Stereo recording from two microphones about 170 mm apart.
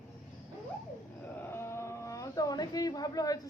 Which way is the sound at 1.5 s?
15° left (ahead or behind).